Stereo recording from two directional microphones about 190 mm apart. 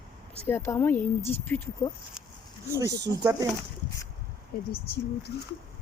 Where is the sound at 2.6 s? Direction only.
15° right (ahead or behind).